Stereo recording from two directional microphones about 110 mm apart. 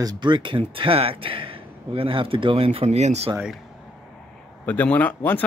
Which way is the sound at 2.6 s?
80° right.